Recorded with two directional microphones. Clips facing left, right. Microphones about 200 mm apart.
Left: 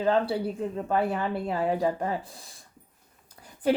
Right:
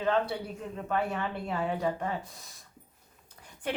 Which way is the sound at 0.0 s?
35° left (ahead or behind).